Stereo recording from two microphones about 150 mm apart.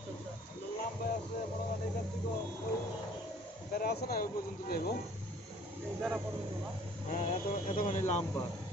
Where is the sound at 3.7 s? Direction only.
90° left.